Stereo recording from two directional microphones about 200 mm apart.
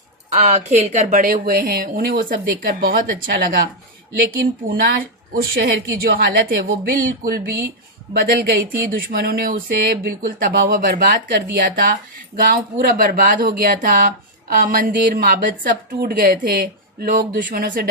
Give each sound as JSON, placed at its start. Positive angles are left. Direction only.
{"t": 0.3, "sound": "a woman's voice", "side_deg": -35}
{"t": 4.7, "sound": "a woman's voice", "side_deg": -50}